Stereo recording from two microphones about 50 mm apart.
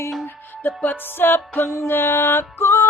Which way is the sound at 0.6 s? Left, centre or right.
Left.